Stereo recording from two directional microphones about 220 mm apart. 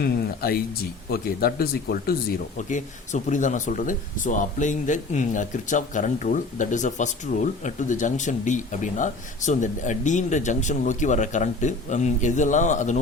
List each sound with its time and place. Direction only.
0.0 s speech: 45° left (ahead or behind)